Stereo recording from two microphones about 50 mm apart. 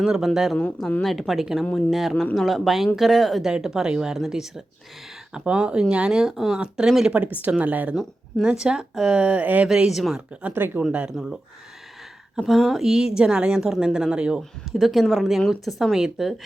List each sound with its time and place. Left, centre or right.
0.0 s a woman's voice: centre
0.5 s speech: centre
1.0 s speech: centre
3.4 s a woman's voice: centre
5.3 s a woman's voice: centre
7.1 s speech: right
8.4 s a woman's voice: centre
9.9 s a woman's voice: centre
10.5 s speech: right
11.1 s speech: centre
12.4 s a woman's voice: centre
14.8 s speech: centre